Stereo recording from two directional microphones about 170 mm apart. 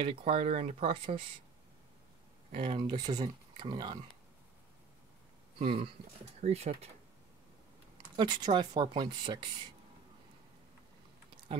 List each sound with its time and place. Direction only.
0.0 s speech: 35° right (ahead or behind)
2.5 s speech: 30° right (ahead or behind)
5.6 s speech: 30° right (ahead or behind)
8.2 s speech: 25° right (ahead or behind)